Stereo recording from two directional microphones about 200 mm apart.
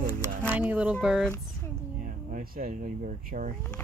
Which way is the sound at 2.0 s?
45° right (ahead or behind).